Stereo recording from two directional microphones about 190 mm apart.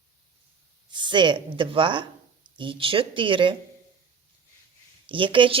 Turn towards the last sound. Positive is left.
turn(degrees=-25)  # may be behind; listen again after turning